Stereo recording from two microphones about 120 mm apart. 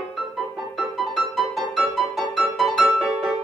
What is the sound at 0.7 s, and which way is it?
Music, centre (ahead or behind).